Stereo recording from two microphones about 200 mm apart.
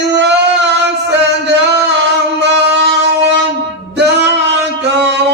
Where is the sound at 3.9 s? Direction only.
60° right (ahead or behind).